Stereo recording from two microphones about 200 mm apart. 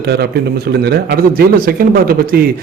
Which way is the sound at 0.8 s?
55° right (ahead or behind).